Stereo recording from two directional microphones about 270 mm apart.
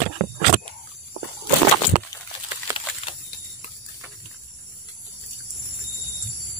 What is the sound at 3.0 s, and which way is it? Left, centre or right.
Snake, left.